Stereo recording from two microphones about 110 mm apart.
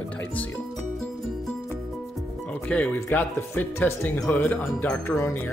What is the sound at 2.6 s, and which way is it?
Speech, 10° left (ahead or behind).